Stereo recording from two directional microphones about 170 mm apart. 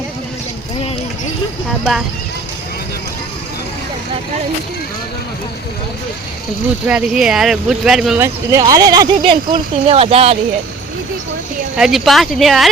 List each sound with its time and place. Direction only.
1.8 s speech: 5° right (ahead or behind)
6.8 s speech: 5° right (ahead or behind)
8.2 s speech: 20° right (ahead or behind); by 10.3 s 35° right (ahead or behind)
11.8 s speech: centre (ahead or behind)